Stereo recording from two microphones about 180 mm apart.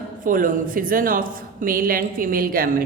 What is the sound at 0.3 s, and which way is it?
A woman's voice, 50° right (ahead or behind).